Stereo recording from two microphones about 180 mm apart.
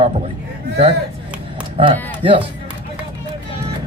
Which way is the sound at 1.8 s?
25° right (ahead or behind).